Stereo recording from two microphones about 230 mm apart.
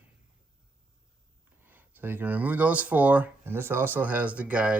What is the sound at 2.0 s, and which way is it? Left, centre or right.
Speech, centre.